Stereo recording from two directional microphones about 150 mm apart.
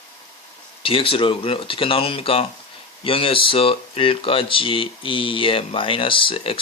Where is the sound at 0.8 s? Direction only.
35° left (ahead or behind).